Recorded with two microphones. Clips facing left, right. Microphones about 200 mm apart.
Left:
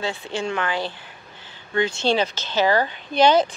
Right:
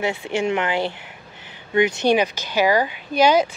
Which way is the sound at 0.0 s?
20° right (ahead or behind).